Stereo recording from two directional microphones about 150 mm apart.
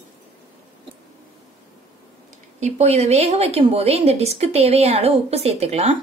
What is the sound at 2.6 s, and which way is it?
A woman's voice, 45° right (ahead or behind).